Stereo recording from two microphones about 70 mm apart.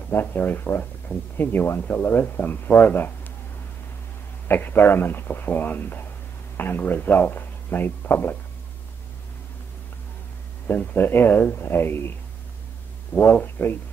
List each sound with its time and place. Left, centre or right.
0.1 s speech: left
4.5 s speech: left
10.7 s speech: left
13.2 s speech: left